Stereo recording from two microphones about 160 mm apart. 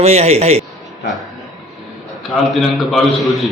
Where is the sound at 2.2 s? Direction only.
Centre (ahead or behind).